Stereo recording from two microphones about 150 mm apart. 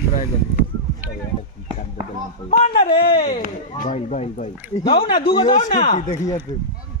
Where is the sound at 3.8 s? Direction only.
50° left (ahead or behind).